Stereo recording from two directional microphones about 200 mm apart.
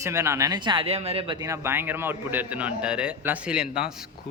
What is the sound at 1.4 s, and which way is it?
Speech, 15° right (ahead or behind).